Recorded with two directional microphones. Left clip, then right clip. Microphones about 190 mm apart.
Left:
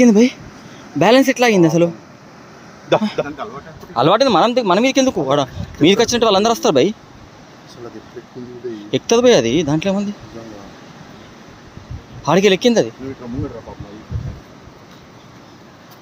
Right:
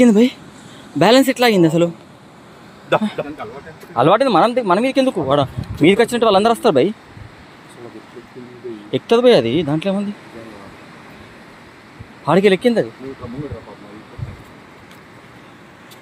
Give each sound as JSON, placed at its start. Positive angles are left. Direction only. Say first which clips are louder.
{"t": 0.0, "sound": "speech", "louder": "left 1 dB", "side_deg": 0}
{"t": 3.2, "sound": "speech", "louder": "left 3 dB", "side_deg": 30}
{"t": 3.9, "sound": "speech", "louder": "even", "side_deg": -5}
{"t": 8.9, "sound": "speech", "louder": "even", "side_deg": 0}
{"t": 12.2, "sound": "speech", "louder": "even", "side_deg": 0}